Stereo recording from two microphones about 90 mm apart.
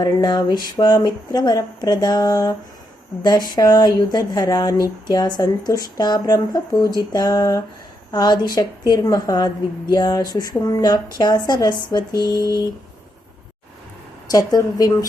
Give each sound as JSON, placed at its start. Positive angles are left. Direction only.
{"t": 0.0, "sound": "speech", "side_deg": 50}
{"t": 14.3, "sound": "speech", "side_deg": 45}